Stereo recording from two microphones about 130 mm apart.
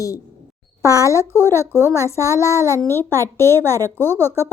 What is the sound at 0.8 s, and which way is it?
Speech, 25° left (ahead or behind).